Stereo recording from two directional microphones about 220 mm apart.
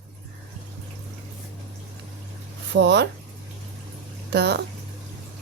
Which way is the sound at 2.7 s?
50° right (ahead or behind).